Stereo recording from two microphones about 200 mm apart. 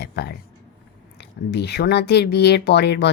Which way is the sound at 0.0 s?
55° left (ahead or behind).